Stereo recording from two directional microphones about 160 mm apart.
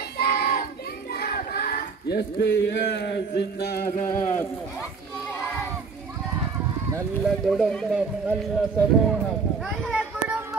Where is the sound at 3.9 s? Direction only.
55° left (ahead or behind).